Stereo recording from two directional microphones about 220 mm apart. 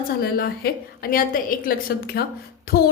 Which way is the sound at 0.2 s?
45° left (ahead or behind).